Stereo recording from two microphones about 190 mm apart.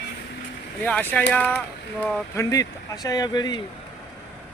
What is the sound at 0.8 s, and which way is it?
Speech, 5° left (ahead or behind).